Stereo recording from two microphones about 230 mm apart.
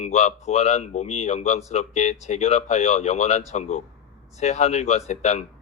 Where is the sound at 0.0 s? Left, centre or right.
Left.